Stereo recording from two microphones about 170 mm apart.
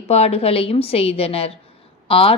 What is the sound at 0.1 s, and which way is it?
A woman's voice, 40° left (ahead or behind).